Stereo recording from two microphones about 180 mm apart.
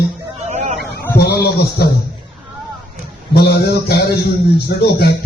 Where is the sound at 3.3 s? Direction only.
65° left (ahead or behind).